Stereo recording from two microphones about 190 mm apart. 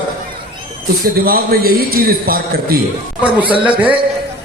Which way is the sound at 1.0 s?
50° right (ahead or behind).